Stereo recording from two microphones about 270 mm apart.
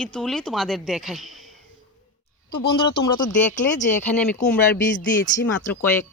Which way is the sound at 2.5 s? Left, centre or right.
Left.